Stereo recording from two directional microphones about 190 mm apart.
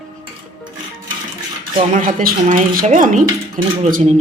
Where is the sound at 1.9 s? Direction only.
45° right (ahead or behind).